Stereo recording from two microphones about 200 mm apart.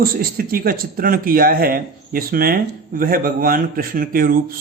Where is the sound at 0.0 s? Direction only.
45° right (ahead or behind).